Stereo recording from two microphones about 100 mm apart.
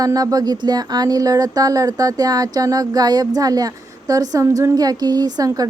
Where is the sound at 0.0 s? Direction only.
35° right (ahead or behind).